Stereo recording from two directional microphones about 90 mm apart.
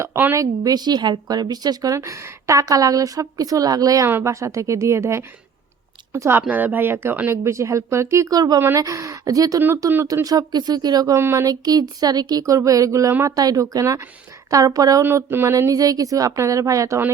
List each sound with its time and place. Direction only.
0.3 s speech: 45° right (ahead or behind)
2.0 s a woman's voice: 30° right (ahead or behind)
4.0 s a woman's voice: 30° right (ahead or behind)
9.6 s speech: 25° right (ahead or behind)
10.2 s speech: 50° right (ahead or behind)
11.2 s speech: 25° right (ahead or behind)
11.4 s a woman's voice: 45° right (ahead or behind)
15.0 s a woman's voice: 25° right (ahead or behind)